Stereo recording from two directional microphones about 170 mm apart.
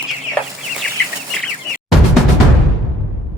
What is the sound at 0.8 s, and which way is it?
Chicken, 5° left (ahead or behind).